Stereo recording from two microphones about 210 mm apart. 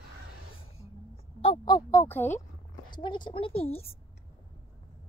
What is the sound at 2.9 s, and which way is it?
A woman's voice, 20° left (ahead or behind).